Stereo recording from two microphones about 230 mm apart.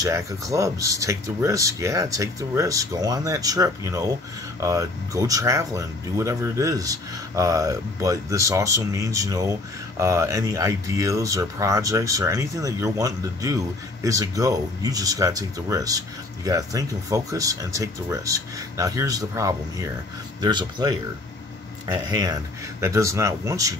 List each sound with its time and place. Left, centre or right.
0.0 s speech: centre